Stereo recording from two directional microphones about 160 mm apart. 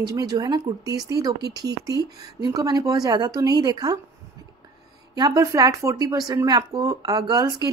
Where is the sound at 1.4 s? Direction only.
90° right.